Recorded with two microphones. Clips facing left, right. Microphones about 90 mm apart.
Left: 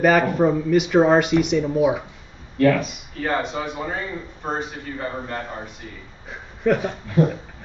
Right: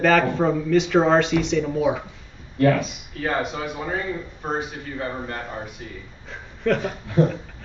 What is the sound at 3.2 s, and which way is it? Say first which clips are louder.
A man's voice: left 1 dB; centre (ahead or behind).